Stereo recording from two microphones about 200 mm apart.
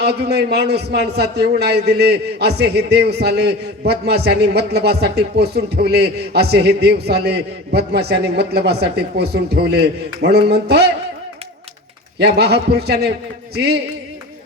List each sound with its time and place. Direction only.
0.0 s a man's voice: 55° right (ahead or behind)
12.2 s a man's voice: 55° right (ahead or behind)